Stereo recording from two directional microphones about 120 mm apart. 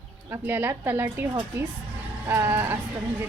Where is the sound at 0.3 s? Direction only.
15° right (ahead or behind).